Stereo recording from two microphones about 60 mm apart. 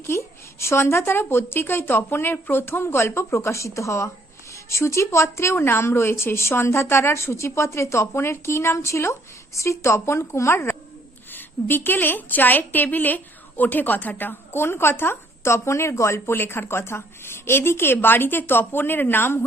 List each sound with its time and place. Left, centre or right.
0.2 s a woman's voice: left
11.3 s a woman's voice: left